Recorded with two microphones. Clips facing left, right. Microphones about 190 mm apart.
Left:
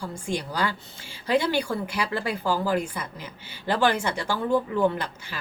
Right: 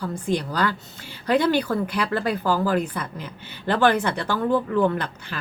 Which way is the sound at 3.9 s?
60° right (ahead or behind).